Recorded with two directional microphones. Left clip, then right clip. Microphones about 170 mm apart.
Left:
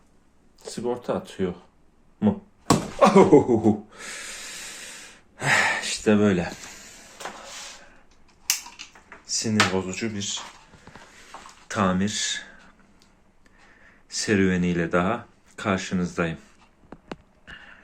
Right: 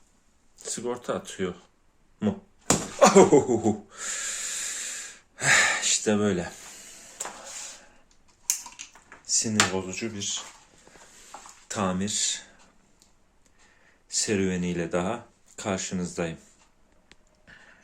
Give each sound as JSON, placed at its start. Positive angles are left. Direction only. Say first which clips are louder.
{"t": 0.6, "sound": "speech", "louder": "left 3 dB", "side_deg": -5}
{"t": 3.0, "sound": "a sound", "louder": "left 1 dB", "side_deg": -10}
{"t": 9.2, "sound": "speech", "louder": "left 2 dB", "side_deg": -25}
{"t": 11.7, "sound": "speech", "louder": "left 4 dB", "side_deg": -15}
{"t": 14.1, "sound": "speech", "louder": "left 4 dB", "side_deg": -10}
{"t": 17.4, "sound": "a sound", "louder": "left 7 dB", "side_deg": -10}